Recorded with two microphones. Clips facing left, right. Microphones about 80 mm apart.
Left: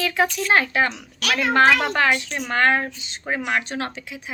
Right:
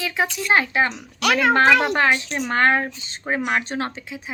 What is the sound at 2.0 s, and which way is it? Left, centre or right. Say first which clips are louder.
Speech: right 1 dB; right.